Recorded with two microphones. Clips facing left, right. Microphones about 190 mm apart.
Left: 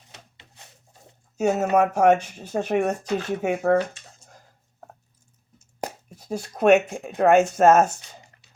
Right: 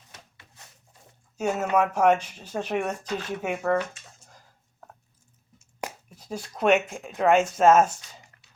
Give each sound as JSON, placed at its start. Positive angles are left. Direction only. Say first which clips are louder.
{"t": 0.1, "sound": "a sound", "louder": "left 2 dB", "side_deg": 25}
{"t": 0.9, "sound": "speech", "louder": "left 6 dB", "side_deg": 40}
{"t": 5.5, "sound": "chopping", "louder": "left 4 dB", "side_deg": 40}
{"t": 6.4, "sound": "speech", "louder": "left 5 dB", "side_deg": 45}